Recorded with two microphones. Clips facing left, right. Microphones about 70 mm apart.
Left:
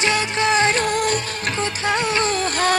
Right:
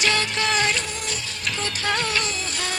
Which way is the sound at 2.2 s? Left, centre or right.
Left.